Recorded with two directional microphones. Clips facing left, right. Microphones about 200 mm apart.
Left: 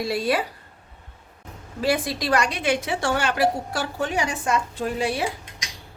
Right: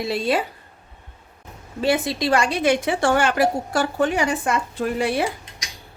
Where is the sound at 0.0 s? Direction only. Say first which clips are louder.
Right 1 dB; 25° right (ahead or behind).